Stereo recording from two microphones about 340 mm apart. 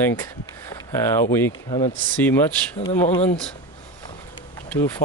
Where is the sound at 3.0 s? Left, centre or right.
Centre.